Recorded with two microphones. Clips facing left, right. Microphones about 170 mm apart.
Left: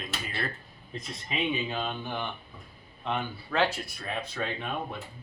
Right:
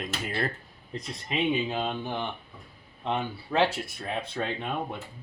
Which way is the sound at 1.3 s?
25° right (ahead or behind).